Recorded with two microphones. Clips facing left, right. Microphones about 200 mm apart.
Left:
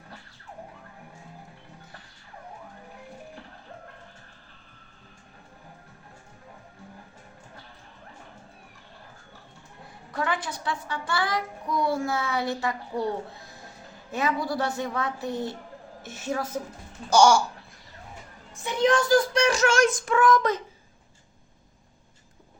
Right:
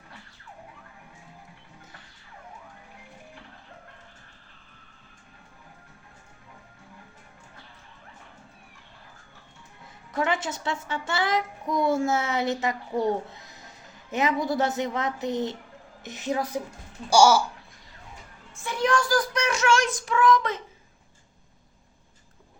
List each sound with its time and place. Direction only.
10.1 s a child's voice: 25° right (ahead or behind); by 17.4 s 5° right (ahead or behind)
18.5 s child singing: 20° left (ahead or behind); by 20.6 s 45° left (ahead or behind)